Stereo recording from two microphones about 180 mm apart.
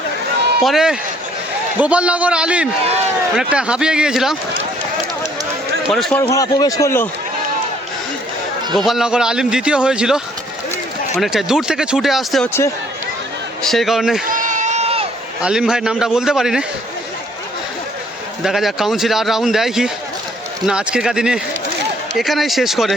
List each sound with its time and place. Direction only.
0.6 s a man's voice: centre (ahead or behind)
5.9 s a man's voice: 5° left (ahead or behind)
6.3 s a man's voice: 20° left (ahead or behind)
8.8 s a man's voice: centre (ahead or behind)
11.2 s a man's voice: centre (ahead or behind)
13.6 s a man's voice: centre (ahead or behind)
14.3 s crowd: 45° right (ahead or behind)
15.4 s a man's voice: 5° right (ahead or behind)
18.4 s a man's voice: centre (ahead or behind)